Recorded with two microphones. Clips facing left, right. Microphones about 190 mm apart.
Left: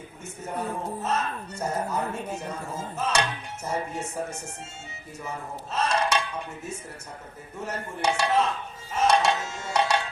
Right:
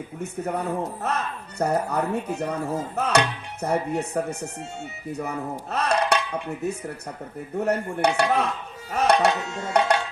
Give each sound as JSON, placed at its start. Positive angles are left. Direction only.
{"t": 0.2, "sound": "speech", "side_deg": -65}
{"t": 5.7, "sound": "a sound", "side_deg": -60}
{"t": 7.5, "sound": "speech", "side_deg": -60}
{"t": 8.9, "sound": "tabla", "side_deg": -60}